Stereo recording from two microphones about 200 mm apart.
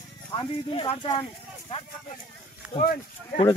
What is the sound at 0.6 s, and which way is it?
Speech, 30° left (ahead or behind).